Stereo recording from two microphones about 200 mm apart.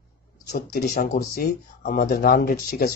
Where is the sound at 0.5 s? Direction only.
45° left (ahead or behind).